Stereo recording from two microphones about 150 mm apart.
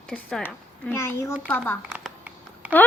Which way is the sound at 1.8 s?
5° right (ahead or behind).